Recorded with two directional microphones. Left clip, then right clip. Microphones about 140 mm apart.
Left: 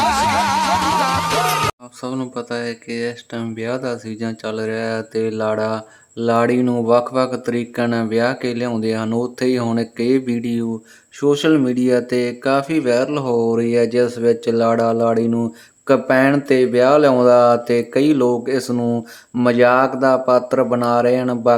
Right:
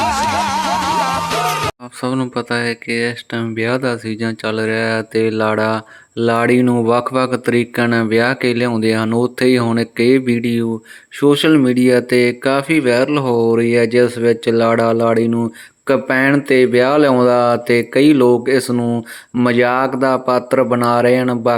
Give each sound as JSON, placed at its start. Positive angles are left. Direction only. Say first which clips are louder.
{"t": 0.0, "sound": "music", "louder": "even", "side_deg": 0}
{"t": 2.3, "sound": "speech", "louder": "right 6 dB", "side_deg": -30}
{"t": 19.5, "sound": "speech", "louder": "left 1 dB", "side_deg": -20}